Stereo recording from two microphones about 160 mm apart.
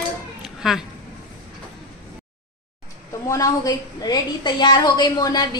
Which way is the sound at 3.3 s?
20° left (ahead or behind).